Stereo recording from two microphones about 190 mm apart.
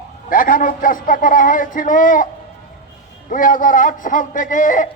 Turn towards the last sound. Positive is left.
turn(degrees=45)  # may be behind; listen again after turning